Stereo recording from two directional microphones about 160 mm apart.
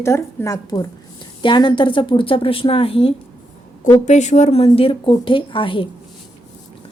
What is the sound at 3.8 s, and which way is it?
Speech, 50° left (ahead or behind).